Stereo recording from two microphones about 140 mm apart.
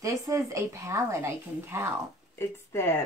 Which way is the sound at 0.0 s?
20° right (ahead or behind).